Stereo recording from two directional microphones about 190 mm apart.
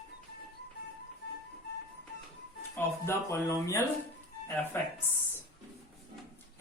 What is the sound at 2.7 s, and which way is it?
Speech, 15° left (ahead or behind).